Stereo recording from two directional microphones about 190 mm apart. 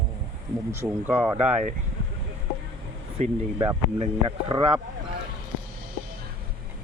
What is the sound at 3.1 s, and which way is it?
Speech, 30° right (ahead or behind).